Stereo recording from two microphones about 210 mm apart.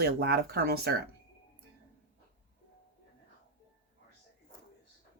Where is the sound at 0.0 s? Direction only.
50° right (ahead or behind).